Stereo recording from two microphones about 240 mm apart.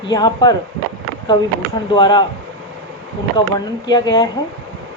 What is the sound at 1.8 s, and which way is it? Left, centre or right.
Speech, centre.